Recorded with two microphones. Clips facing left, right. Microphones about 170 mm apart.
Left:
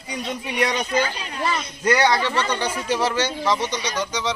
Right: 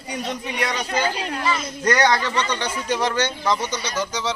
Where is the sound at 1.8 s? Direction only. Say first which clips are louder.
Even; 5° left (ahead or behind).